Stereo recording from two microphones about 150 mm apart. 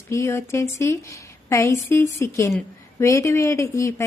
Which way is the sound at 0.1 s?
20° left (ahead or behind).